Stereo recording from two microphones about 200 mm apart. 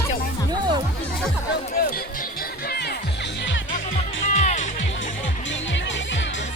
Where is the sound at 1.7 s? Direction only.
50° left (ahead or behind).